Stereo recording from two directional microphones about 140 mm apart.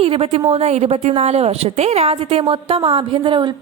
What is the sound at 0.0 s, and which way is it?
A woman's voice, 45° right (ahead or behind).